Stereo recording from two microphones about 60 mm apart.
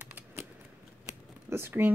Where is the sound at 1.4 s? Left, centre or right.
Right.